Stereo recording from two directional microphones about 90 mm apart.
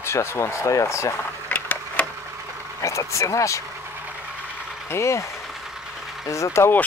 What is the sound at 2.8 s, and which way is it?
Speech, 35° left (ahead or behind).